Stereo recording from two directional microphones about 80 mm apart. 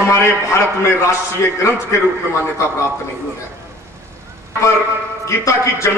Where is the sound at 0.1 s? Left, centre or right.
Left.